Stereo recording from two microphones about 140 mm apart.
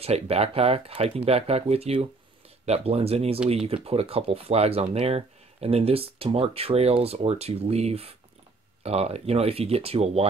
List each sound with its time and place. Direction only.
0.0 s speech: 45° right (ahead or behind)